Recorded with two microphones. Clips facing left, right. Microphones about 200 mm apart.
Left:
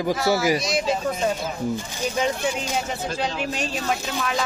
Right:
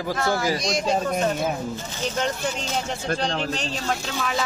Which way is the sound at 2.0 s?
10° left (ahead or behind).